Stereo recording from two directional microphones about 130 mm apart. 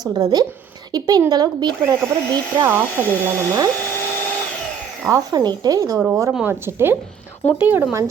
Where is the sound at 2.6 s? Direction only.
15° right (ahead or behind).